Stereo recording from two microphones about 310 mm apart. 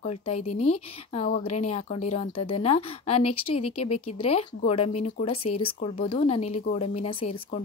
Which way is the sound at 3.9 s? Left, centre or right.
Centre.